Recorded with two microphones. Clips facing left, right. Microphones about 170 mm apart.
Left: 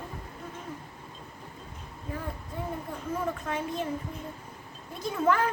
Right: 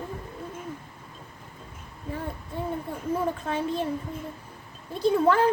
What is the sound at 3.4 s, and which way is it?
Speech, 30° right (ahead or behind).